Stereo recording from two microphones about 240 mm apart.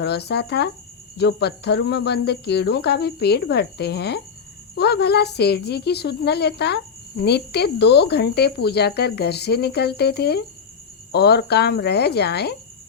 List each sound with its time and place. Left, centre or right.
0.0 s speech: left